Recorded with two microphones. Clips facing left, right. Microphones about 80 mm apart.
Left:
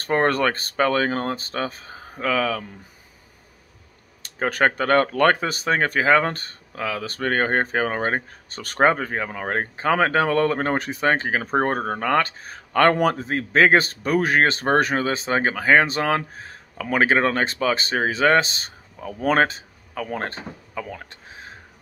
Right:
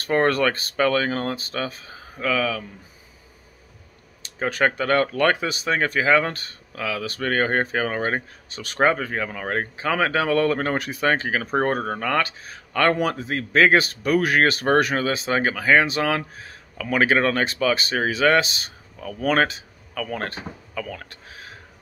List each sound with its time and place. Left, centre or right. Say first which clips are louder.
0.0 s speech: even; left
4.2 s speech: left 1 dB; left